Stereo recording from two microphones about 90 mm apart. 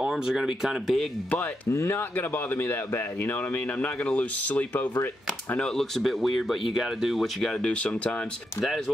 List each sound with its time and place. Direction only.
0.0 s speech: 5° right (ahead or behind)
1.7 s speech: 25° left (ahead or behind)
5.6 s speech: 5° left (ahead or behind)